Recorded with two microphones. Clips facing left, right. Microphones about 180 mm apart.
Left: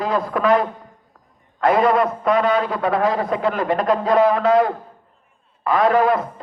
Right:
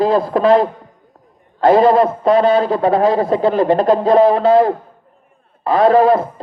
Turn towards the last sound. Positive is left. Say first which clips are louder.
# right 6 dB
turn(degrees=-30)  # may be behind; listen again after turning